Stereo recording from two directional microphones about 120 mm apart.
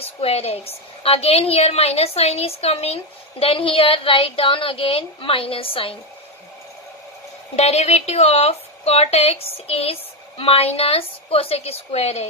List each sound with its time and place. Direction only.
0.0 s a woman's voice: 55° left (ahead or behind)
7.5 s a woman's voice: 60° left (ahead or behind)